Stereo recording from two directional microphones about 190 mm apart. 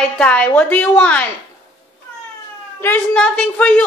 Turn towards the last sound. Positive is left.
turn(degrees=5)  # may be behind; listen again after turning